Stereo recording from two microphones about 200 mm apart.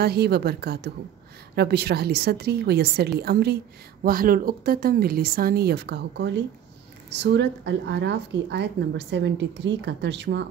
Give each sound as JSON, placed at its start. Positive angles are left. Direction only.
{"t": 0.0, "sound": "a woman's voice", "side_deg": -55}